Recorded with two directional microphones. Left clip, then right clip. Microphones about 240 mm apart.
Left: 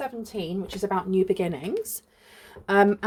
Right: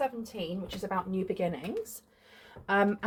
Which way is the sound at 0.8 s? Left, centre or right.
Left.